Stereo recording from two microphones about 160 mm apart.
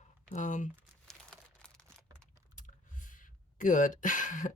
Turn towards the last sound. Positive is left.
turn(degrees=55)  # may be behind; listen again after turning